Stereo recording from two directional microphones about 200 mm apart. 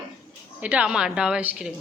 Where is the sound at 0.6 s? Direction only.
5° right (ahead or behind).